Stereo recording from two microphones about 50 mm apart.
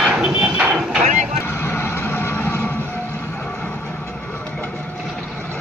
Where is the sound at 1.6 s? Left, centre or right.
Left.